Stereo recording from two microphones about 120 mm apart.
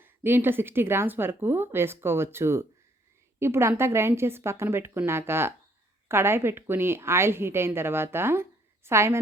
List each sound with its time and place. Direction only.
0.0 s a woman's voice: 20° right (ahead or behind)